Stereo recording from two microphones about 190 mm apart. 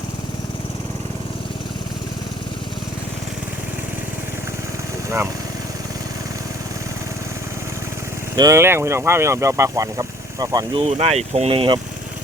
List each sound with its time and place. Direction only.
8.4 s speech: 15° right (ahead or behind)
10.8 s speech: 35° right (ahead or behind)